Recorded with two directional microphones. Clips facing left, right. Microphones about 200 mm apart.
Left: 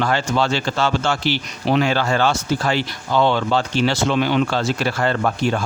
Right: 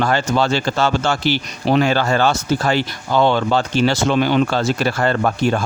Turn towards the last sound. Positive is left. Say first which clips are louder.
# right 2 dB
turn(degrees=-45)  # may be behind; listen again after turning